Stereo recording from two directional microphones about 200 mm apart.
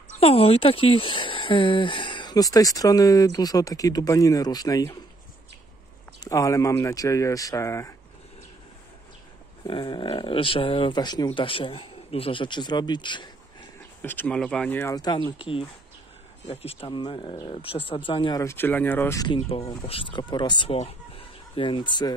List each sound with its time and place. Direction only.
0.1 s speech: 30° left (ahead or behind)
6.2 s speech: 15° left (ahead or behind)
9.7 s a man's voice: 25° left (ahead or behind)
14.0 s speech: 10° left (ahead or behind)
16.4 s speech: 30° left (ahead or behind)